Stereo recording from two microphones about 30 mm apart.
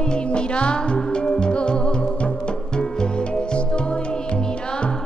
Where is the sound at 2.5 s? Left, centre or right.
Left.